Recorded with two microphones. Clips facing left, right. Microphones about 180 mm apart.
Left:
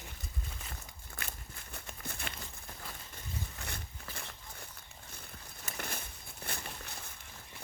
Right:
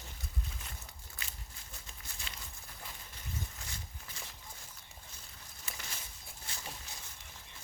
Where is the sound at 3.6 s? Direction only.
60° left (ahead or behind).